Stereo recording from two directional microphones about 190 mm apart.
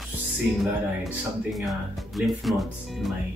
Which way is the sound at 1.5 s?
Centre (ahead or behind).